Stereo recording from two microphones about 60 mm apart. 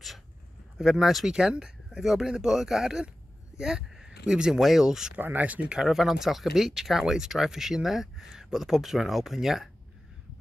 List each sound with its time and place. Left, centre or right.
0.7 s speech: centre
5.2 s speech: right
5.8 s speech: centre